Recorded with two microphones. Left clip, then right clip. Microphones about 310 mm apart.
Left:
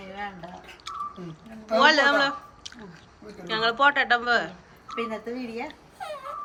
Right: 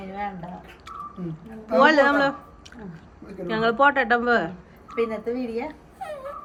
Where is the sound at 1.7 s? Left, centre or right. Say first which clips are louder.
Right 2 dB; centre.